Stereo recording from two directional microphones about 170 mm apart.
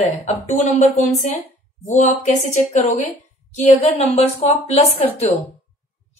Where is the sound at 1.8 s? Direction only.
45° left (ahead or behind).